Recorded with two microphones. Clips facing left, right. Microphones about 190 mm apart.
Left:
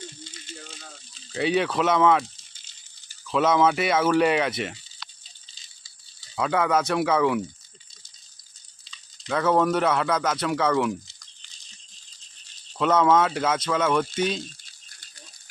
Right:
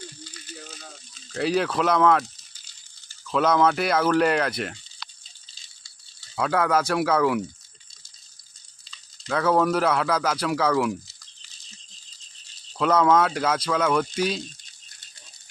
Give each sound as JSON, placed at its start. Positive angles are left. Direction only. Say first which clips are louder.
{"t": 0.3, "sound": "a sound", "louder": "right 1 dB", "side_deg": 25}
{"t": 1.3, "sound": "speech", "louder": "even", "side_deg": 0}
{"t": 2.3, "sound": "rattle", "louder": "even", "side_deg": 20}
{"t": 3.2, "sound": "speech", "louder": "even", "side_deg": 0}
{"t": 5.5, "sound": "a sound", "louder": "even", "side_deg": 0}
{"t": 8.9, "sound": "speech", "louder": "even", "side_deg": 0}
{"t": 12.7, "sound": "speech", "louder": "even", "side_deg": 5}